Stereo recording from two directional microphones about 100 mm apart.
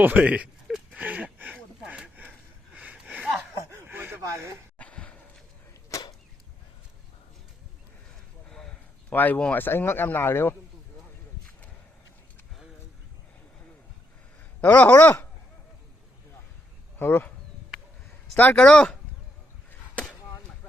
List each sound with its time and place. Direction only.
0.0 s a sound: 15° right (ahead or behind)
3.3 s snicker: 25° right (ahead or behind)
4.8 s a sound: 10° left (ahead or behind)
5.9 s arrow: 35° left (ahead or behind)
8.4 s a sound: 5° left (ahead or behind)
9.1 s speech: 15° left (ahead or behind)
14.6 s speech: 15° left (ahead or behind)
17.0 s speech: 20° left (ahead or behind)
18.3 s speech: 15° left (ahead or behind)